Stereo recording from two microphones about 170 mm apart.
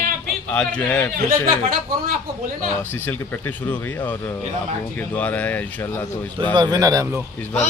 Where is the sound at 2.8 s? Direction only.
10° left (ahead or behind).